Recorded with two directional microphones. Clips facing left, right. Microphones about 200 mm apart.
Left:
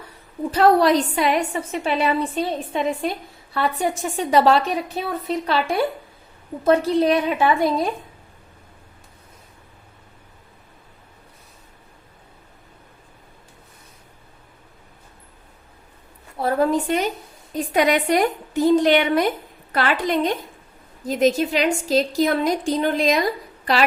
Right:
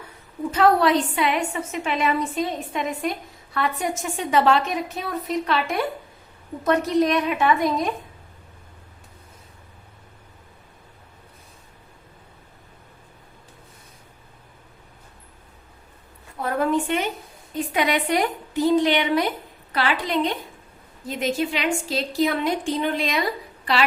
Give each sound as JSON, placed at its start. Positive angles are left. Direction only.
{"t": 0.5, "sound": "a woman's voice", "side_deg": 35}
{"t": 16.4, "sound": "a sound", "side_deg": 35}
{"t": 17.5, "sound": "a woman's voice", "side_deg": 45}